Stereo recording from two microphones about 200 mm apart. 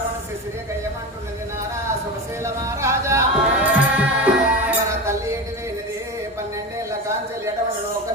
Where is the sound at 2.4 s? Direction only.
15° right (ahead or behind).